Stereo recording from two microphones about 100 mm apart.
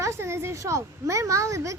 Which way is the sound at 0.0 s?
25° right (ahead or behind).